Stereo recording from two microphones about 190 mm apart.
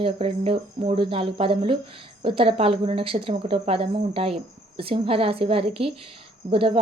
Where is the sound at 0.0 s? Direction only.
30° right (ahead or behind).